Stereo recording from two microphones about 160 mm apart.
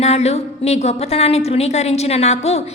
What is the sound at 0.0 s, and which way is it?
A woman's voice, 40° left (ahead or behind).